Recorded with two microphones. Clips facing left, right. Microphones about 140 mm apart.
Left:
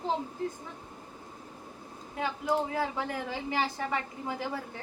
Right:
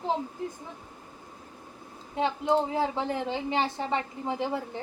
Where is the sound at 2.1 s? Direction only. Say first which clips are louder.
Right 5 dB; 25° right (ahead or behind).